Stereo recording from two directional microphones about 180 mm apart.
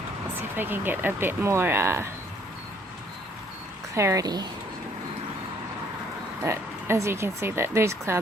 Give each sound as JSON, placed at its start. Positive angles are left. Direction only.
{"t": 0.5, "sound": "speech", "side_deg": -10}
{"t": 3.9, "sound": "a woman's voice", "side_deg": -15}
{"t": 6.4, "sound": "speech", "side_deg": -15}